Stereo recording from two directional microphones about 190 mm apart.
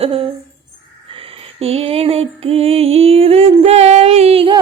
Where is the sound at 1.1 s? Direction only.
30° right (ahead or behind).